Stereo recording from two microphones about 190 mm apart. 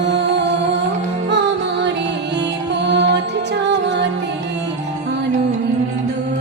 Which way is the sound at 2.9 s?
65° right (ahead or behind).